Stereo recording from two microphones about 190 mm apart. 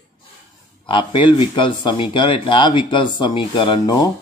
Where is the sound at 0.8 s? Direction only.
25° left (ahead or behind).